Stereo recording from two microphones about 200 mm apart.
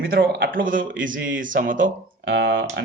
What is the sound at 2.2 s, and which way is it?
Speech, 60° right (ahead or behind).